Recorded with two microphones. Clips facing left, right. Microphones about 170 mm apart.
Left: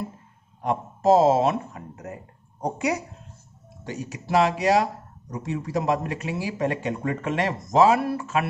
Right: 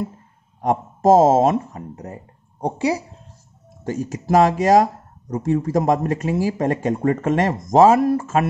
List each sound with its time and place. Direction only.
0.6 s speech: 45° right (ahead or behind)
3.8 s speech: 45° right (ahead or behind)